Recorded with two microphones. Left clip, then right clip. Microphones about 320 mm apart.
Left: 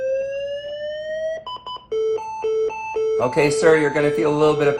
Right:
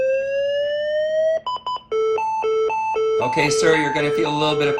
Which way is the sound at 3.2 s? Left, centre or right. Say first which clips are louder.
Left 4 dB; centre.